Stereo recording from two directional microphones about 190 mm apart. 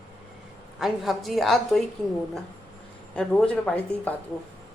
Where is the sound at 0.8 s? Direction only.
Centre (ahead or behind).